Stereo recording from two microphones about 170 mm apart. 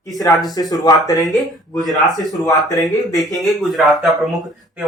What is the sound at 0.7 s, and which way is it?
Speech, 20° left (ahead or behind).